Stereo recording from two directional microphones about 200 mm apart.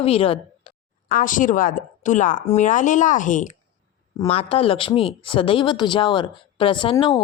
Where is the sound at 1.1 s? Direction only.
40° left (ahead or behind).